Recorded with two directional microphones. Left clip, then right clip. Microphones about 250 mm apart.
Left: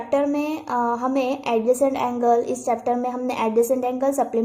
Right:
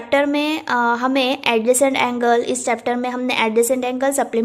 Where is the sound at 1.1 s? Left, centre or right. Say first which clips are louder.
Right 4 dB; centre.